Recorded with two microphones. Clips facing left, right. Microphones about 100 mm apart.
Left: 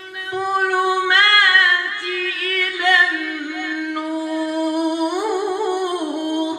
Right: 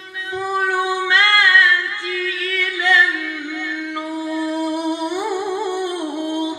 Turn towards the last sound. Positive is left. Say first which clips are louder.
# left 1 dB
turn(degrees=50)  # may be behind; listen again after turning